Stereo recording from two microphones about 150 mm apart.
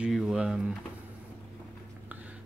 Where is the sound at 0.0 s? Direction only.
5° right (ahead or behind).